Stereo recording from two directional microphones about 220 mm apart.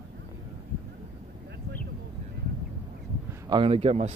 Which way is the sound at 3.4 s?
20° right (ahead or behind).